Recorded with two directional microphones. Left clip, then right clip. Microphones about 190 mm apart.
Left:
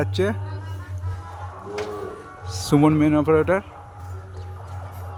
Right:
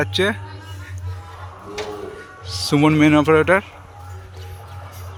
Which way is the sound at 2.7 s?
5° left (ahead or behind).